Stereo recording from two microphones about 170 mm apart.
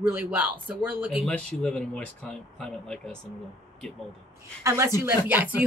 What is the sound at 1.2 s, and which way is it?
Speech, 5° left (ahead or behind).